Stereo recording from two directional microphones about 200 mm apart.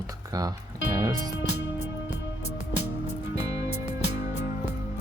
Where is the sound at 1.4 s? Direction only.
60° left (ahead or behind).